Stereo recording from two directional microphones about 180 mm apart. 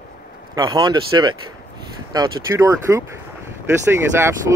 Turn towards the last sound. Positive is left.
turn(degrees=-15)  # may be behind; listen again after turning